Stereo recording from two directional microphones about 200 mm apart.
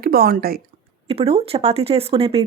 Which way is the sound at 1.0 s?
30° right (ahead or behind).